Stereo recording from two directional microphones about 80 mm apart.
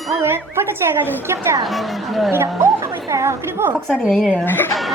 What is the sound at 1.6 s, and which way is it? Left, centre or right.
Speech, centre.